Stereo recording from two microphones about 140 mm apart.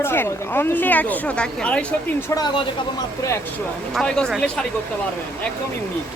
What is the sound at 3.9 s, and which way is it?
Speech, 5° left (ahead or behind).